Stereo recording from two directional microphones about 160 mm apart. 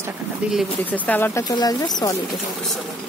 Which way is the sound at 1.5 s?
25° left (ahead or behind).